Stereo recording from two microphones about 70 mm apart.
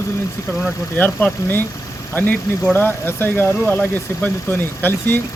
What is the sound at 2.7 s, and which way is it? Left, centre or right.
Speech, left.